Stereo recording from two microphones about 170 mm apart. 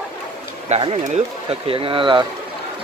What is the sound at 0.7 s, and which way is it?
Speech, 40° right (ahead or behind).